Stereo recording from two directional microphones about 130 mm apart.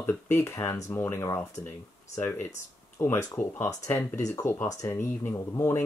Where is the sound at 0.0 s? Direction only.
20° left (ahead or behind).